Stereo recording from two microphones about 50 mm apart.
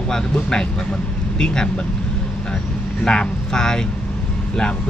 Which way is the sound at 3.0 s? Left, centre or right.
Centre.